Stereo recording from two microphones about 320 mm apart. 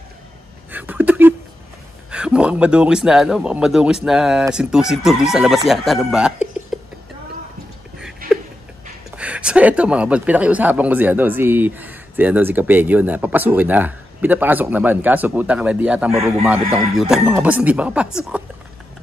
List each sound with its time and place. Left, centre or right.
0.7 s a sound: centre
2.0 s speech: centre
9.1 s speech: centre